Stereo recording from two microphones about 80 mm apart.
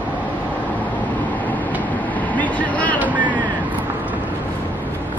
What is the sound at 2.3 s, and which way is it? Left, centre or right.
Vehicle, centre.